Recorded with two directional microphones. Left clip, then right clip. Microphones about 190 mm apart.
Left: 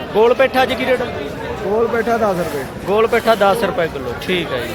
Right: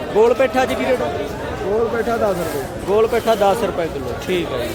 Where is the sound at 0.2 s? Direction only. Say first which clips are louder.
Left 2 dB; centre (ahead or behind).